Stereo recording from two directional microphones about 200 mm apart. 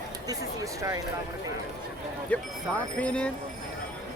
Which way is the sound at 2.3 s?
5° left (ahead or behind).